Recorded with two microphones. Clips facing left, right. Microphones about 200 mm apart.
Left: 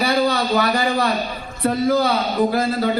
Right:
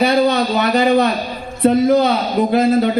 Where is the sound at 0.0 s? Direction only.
20° right (ahead or behind).